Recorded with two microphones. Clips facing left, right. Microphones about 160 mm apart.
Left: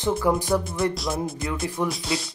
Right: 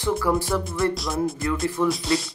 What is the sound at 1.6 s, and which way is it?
Speech, 20° left (ahead or behind).